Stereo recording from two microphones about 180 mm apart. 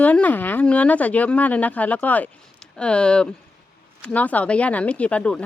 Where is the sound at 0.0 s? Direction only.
10° left (ahead or behind).